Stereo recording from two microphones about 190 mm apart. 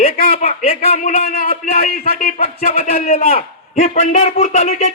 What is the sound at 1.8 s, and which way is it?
Speech, 50° left (ahead or behind).